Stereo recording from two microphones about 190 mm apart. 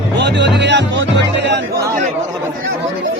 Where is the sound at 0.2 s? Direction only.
65° right (ahead or behind).